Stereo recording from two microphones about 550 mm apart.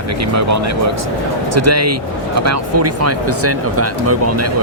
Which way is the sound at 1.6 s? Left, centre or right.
Right.